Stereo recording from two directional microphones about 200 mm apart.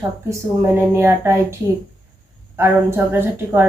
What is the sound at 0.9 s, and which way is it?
Speech, 10° right (ahead or behind).